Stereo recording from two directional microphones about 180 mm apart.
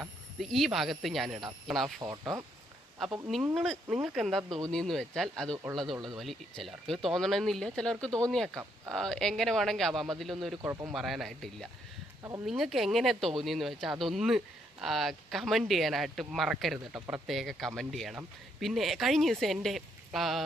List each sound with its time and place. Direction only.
0.3 s speech: centre (ahead or behind)
2.0 s speech: 20° right (ahead or behind)
3.2 s speech: centre (ahead or behind)
10.6 s speech: 20° right (ahead or behind)
10.8 s speech: centre (ahead or behind)